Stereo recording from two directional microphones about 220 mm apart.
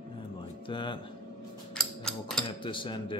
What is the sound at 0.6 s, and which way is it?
Speech, 20° left (ahead or behind).